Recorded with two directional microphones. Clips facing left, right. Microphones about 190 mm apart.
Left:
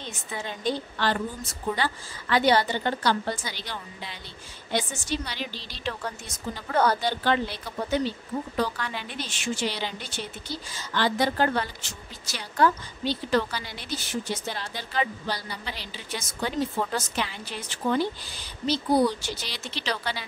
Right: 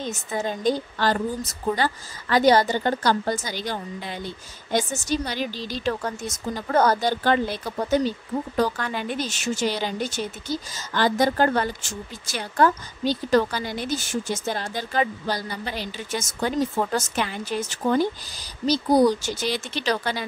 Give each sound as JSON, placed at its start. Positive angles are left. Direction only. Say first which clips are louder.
{"t": 0.0, "sound": "speech", "louder": "right 8 dB", "side_deg": -45}